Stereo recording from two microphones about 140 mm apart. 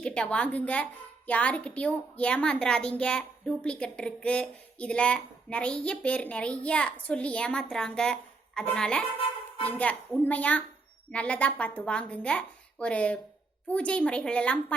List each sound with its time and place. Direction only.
0.0 s a woman's voice: 5° left (ahead or behind)